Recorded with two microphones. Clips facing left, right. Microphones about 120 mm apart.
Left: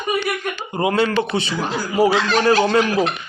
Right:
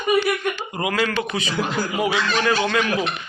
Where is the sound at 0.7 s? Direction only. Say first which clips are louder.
Left 7 dB; 30° left (ahead or behind).